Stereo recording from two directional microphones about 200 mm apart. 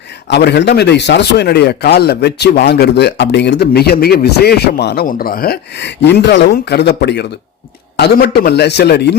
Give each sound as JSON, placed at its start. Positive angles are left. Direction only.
{"t": 0.3, "sound": "a man's voice", "side_deg": 55}